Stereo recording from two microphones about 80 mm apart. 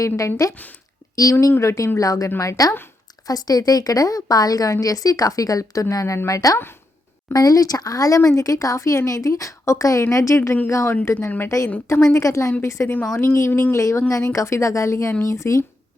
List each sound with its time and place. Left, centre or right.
0.0 s a woman's voice: left
13.7 s a woman's voice: left